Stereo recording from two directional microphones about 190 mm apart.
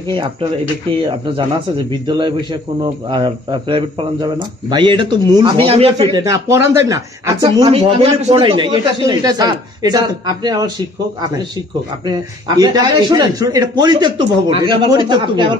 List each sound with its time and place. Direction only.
1.0 s speech: 25° right (ahead or behind)
6.1 s speech: 15° right (ahead or behind)
12.1 s speech: 20° right (ahead or behind)